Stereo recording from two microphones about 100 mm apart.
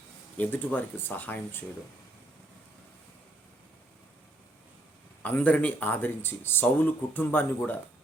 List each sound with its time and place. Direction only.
0.3 s speech: 15° left (ahead or behind)
5.2 s speech: 15° left (ahead or behind)